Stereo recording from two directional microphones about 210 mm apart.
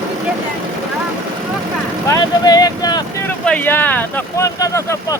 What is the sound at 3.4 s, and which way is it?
Speech, 5° left (ahead or behind).